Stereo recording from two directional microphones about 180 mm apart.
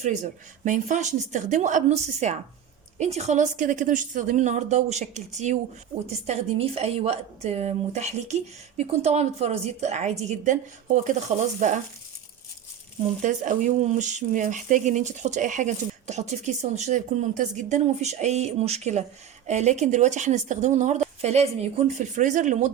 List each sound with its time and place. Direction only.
0.6 s a woman's voice: 45° right (ahead or behind)
13.2 s speech: 45° right (ahead or behind)